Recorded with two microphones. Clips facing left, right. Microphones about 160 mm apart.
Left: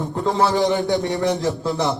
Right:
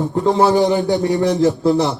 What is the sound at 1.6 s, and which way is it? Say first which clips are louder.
Speech: right 7 dB; 35° right (ahead or behind).